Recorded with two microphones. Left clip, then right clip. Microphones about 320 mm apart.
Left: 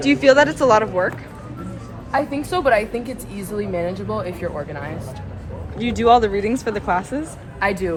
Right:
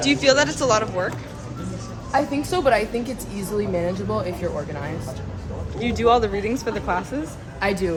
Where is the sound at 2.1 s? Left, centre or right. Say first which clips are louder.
Left 1 dB; centre.